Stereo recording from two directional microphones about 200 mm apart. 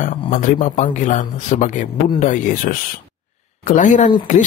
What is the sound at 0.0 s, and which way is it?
Speech, 40° left (ahead or behind).